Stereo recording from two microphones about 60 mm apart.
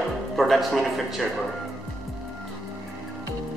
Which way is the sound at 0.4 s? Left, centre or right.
Centre.